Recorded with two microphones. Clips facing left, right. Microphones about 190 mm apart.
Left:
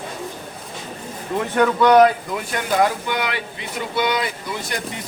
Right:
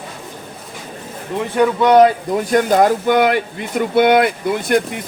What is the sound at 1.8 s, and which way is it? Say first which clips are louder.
Speech: right 2 dB; 25° right (ahead or behind).